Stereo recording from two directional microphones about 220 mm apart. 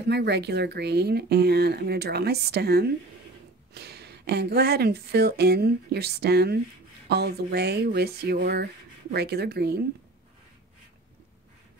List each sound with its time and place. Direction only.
0.1 s speech: 50° right (ahead or behind)